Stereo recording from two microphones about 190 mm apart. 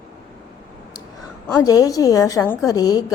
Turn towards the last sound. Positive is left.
turn(degrees=20)  # may be behind; listen again after turning